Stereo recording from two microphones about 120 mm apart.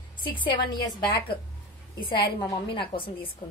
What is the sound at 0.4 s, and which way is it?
Speech, 40° left (ahead or behind).